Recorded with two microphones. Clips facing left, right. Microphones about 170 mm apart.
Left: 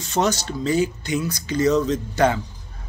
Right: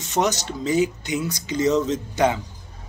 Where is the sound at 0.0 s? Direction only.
20° right (ahead or behind).